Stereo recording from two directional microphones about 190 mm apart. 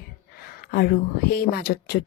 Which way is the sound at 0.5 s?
55° left (ahead or behind).